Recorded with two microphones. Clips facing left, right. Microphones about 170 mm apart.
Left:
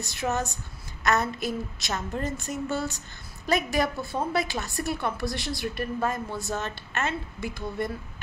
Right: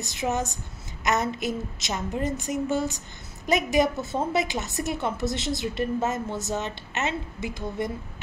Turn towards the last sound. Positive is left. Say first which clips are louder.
# right 1 dB
turn(degrees=-20)  # may be behind; listen again after turning